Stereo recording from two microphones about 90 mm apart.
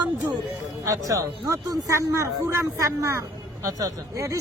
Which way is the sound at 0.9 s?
35° right (ahead or behind).